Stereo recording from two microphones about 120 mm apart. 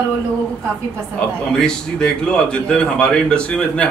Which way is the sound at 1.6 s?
5° left (ahead or behind).